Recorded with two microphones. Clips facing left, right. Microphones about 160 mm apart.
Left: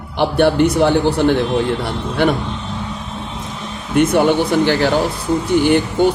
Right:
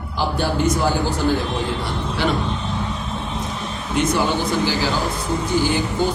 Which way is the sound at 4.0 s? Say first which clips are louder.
Left 7 dB; 60° left (ahead or behind).